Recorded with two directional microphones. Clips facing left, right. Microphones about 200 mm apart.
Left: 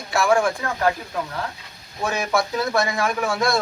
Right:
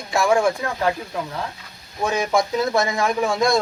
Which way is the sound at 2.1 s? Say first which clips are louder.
Right 3 dB; 25° right (ahead or behind).